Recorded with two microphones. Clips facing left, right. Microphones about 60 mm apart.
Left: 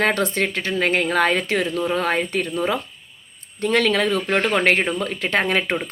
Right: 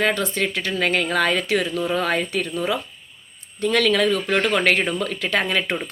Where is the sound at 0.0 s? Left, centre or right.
Left.